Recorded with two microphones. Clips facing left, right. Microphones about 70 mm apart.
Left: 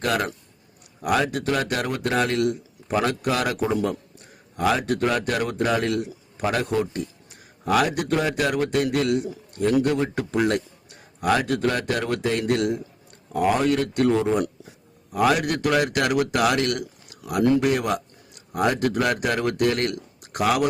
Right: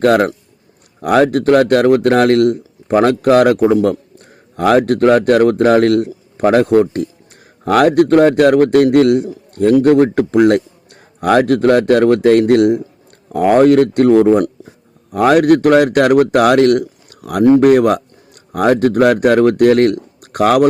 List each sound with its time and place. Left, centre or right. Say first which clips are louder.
0.0 s a man's voice: right 13 dB; right
1.0 s a man's voice: right 11 dB; right
3.2 s a man's voice: right 14 dB; right
3.6 s a man's voice: right 12 dB; right
13.3 s a man's voice: right 12 dB; right